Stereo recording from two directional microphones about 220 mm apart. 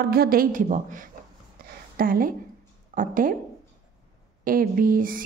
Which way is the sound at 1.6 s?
40° right (ahead or behind).